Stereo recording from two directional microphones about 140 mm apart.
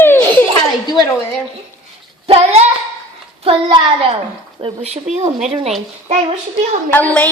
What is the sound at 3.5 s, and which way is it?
Speech, 35° right (ahead or behind).